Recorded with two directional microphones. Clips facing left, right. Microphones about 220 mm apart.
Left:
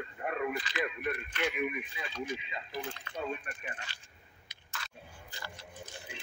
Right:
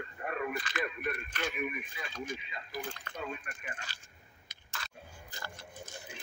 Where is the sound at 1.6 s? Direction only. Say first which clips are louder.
Left 3 dB; 20° left (ahead or behind).